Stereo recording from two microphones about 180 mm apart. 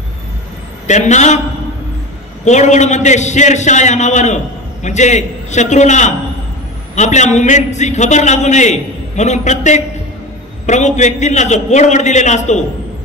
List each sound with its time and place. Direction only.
0.8 s a man's voice: 40° left (ahead or behind)
2.4 s a man's voice: 40° left (ahead or behind)